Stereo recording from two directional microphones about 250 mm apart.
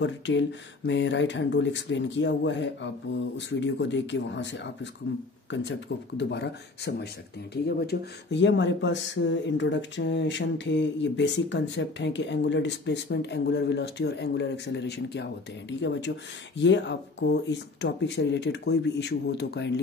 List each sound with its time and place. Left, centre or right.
0.0 s speech: left